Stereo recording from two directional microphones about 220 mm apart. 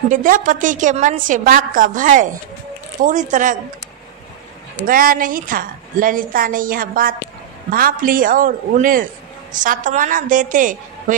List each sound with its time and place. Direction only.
0.1 s a man's voice: 35° right (ahead or behind)
4.8 s a man's voice: 40° right (ahead or behind)